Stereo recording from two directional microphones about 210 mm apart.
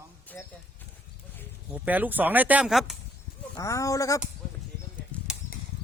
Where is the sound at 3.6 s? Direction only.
15° left (ahead or behind).